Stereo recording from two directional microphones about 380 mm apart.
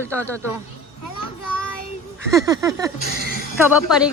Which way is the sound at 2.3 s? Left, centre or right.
Centre.